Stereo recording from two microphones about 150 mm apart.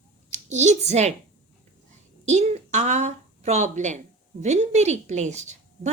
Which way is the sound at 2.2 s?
50° right (ahead or behind).